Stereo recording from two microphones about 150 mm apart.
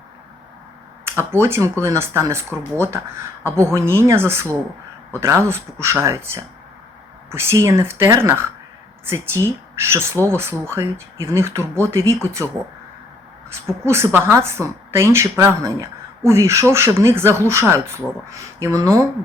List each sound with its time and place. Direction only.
1.0 s a woman's voice: 15° right (ahead or behind)
13.5 s a woman's voice: 20° right (ahead or behind)